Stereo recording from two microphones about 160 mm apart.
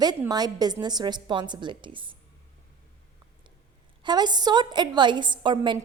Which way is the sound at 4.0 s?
25° right (ahead or behind).